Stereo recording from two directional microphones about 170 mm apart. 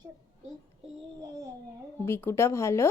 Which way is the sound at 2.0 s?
15° left (ahead or behind).